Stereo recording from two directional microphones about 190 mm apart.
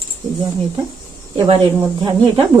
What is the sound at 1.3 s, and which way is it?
Speech, 30° right (ahead or behind).